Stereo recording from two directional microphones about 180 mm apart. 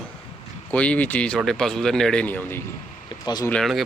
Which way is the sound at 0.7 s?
10° left (ahead or behind).